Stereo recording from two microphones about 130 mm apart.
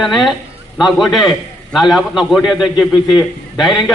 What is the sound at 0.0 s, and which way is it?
A man's voice, centre (ahead or behind).